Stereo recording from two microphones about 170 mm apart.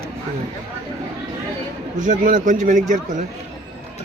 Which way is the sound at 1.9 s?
50° right (ahead or behind).